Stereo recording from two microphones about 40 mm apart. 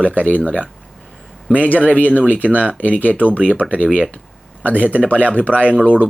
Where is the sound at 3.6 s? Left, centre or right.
Right.